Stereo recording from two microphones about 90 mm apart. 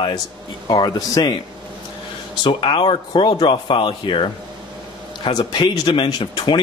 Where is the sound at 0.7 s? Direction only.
45° left (ahead or behind).